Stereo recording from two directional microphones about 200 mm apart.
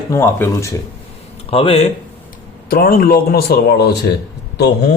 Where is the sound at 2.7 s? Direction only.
45° left (ahead or behind).